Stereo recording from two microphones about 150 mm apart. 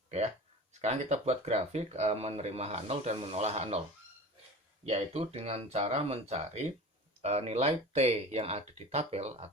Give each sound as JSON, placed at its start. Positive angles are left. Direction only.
{"t": 0.7, "sound": "speech", "side_deg": -50}
{"t": 4.9, "sound": "speech", "side_deg": -45}